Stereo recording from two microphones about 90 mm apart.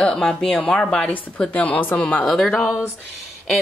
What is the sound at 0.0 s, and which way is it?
A woman's voice, 5° left (ahead or behind).